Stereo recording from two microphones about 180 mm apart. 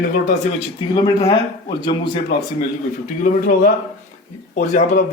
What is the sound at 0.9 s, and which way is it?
Speech, 20° left (ahead or behind).